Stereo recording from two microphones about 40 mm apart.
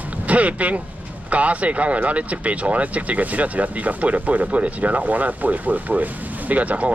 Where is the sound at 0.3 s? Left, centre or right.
Right.